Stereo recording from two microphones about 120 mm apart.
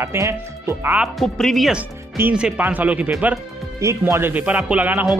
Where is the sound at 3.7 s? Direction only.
25° right (ahead or behind).